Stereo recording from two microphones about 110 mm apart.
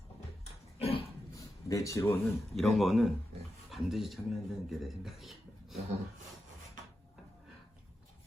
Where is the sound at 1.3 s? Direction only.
30° left (ahead or behind).